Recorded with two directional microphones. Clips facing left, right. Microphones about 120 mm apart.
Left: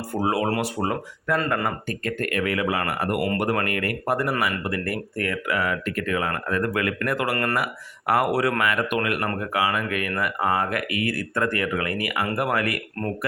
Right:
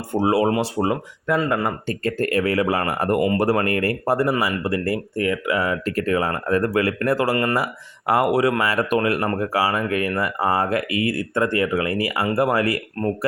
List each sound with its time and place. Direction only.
0.1 s speech: 25° right (ahead or behind); by 1.7 s 10° right (ahead or behind)
1.9 s speech: 30° right (ahead or behind)